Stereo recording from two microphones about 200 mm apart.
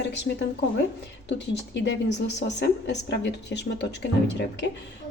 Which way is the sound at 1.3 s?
60° left (ahead or behind).